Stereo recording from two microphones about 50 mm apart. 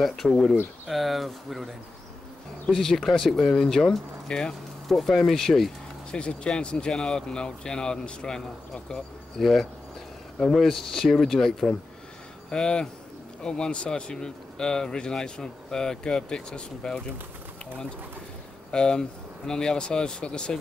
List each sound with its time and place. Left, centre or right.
0.0 s speech: centre
2.7 s speech: centre
6.1 s speech: centre
9.4 s speech: centre
18.7 s speech: centre